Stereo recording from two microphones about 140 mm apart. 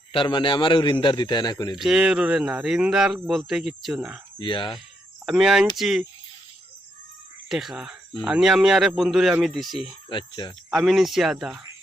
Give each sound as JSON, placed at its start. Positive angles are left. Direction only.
{"t": 0.1, "sound": "a man's voice", "side_deg": 35}
{"t": 1.8, "sound": "speech", "side_deg": -5}
{"t": 4.4, "sound": "a man's voice", "side_deg": 35}
{"t": 5.2, "sound": "speech", "side_deg": -5}
{"t": 7.5, "sound": "speech", "side_deg": 0}
{"t": 10.1, "sound": "a man's voice", "side_deg": 35}
{"t": 10.7, "sound": "speech", "side_deg": 0}